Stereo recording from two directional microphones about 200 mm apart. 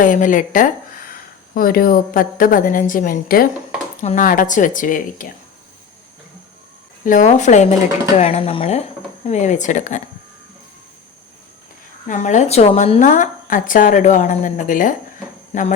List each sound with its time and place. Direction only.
0.0 s a woman's voice: 40° left (ahead or behind)
7.0 s a woman's voice: 40° left (ahead or behind)
12.0 s a woman's voice: 40° left (ahead or behind)